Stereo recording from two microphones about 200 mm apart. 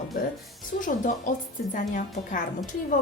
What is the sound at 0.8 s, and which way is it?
A woman's voice, 40° left (ahead or behind).